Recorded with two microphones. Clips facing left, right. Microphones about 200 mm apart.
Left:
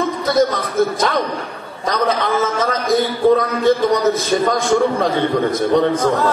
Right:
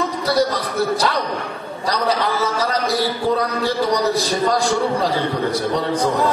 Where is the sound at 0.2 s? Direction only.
35° right (ahead or behind).